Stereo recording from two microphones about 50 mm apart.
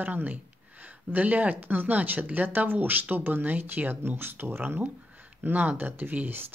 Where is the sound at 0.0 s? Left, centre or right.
Right.